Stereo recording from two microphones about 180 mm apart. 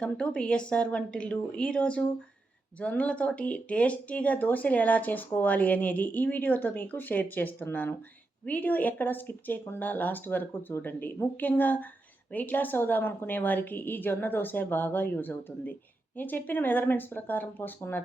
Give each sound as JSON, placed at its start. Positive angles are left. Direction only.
{"t": 0.0, "sound": "a woman's voice", "side_deg": 5}